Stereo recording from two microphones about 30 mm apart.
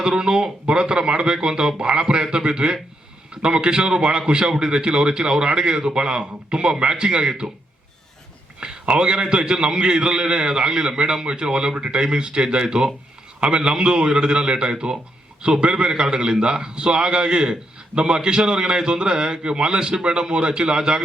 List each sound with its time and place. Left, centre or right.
0.0 s a man's voice: right
8.6 s a man's voice: right